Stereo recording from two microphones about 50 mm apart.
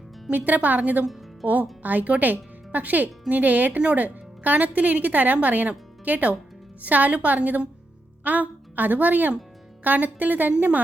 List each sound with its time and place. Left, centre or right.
0.3 s speech: right
1.0 s music: centre
1.8 s a woman's voice: right